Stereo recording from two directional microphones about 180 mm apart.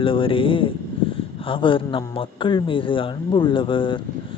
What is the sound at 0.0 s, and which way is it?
Speech, 30° left (ahead or behind).